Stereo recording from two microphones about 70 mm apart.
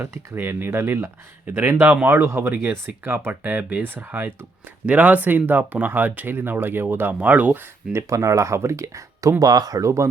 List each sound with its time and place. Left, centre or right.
0.0 s speech: right
7.9 s speech: right
9.4 s speech: right